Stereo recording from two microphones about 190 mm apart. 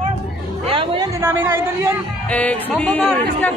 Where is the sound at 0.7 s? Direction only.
30° right (ahead or behind).